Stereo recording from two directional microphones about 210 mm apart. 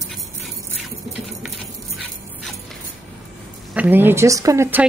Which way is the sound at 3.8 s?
10° right (ahead or behind).